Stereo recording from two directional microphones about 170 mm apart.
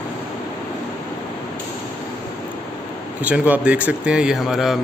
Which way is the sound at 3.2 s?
10° right (ahead or behind).